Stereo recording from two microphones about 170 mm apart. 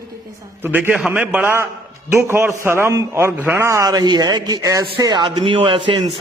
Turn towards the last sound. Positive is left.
turn(degrees=-30)  # may be behind; listen again after turning